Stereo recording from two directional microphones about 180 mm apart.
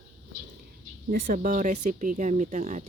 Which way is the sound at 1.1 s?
50° right (ahead or behind).